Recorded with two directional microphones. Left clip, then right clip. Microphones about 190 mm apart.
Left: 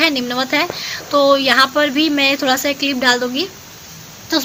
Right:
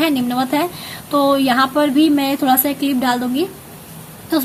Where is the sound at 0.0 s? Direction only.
15° left (ahead or behind).